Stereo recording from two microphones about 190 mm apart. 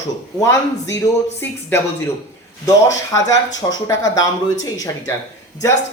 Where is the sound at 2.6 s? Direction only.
20° left (ahead or behind).